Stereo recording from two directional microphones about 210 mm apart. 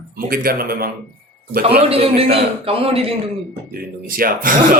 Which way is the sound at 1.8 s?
25° right (ahead or behind).